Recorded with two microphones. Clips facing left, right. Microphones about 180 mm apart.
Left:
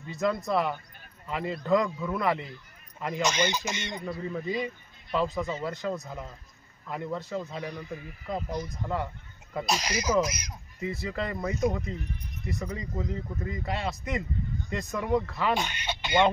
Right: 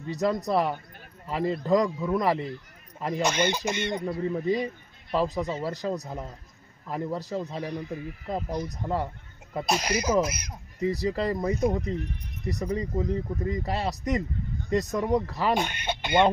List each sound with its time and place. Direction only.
0.0 s speech: 40° right (ahead or behind)
1.9 s speech: 15° right (ahead or behind)
2.1 s speech: 35° right (ahead or behind)
3.2 s speech: 55° right (ahead or behind)
4.3 s speech: 35° right (ahead or behind)
9.7 s speech: 55° right (ahead or behind)
10.8 s speech: 35° right (ahead or behind)
15.5 s speech: 55° right (ahead or behind)